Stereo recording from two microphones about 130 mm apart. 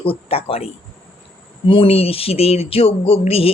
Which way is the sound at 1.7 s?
45° left (ahead or behind).